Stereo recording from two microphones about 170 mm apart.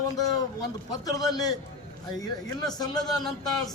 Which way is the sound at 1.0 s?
20° left (ahead or behind).